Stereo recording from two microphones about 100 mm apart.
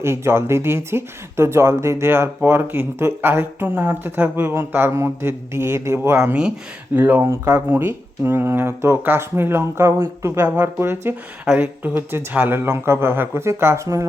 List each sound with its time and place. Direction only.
0.0 s speech: 25° right (ahead or behind)